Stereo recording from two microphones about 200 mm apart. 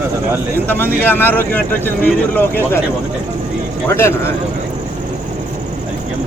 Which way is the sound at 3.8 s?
10° left (ahead or behind).